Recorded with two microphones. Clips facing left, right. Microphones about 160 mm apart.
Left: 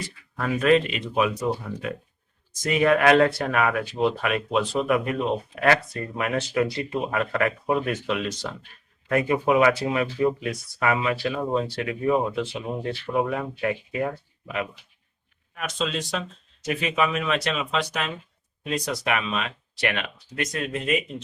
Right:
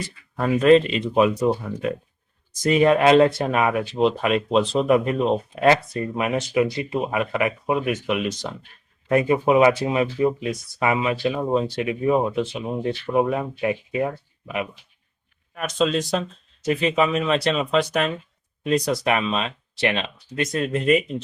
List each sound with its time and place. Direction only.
0.3 s speech: 30° right (ahead or behind)
2.6 s speech: 25° right (ahead or behind)
15.5 s speech: 40° right (ahead or behind)
18.9 s speech: 30° right (ahead or behind)